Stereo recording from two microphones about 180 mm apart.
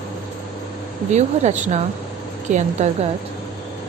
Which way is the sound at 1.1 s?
40° right (ahead or behind).